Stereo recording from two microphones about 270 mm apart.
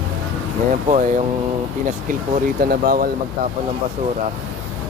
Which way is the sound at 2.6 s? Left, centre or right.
Right.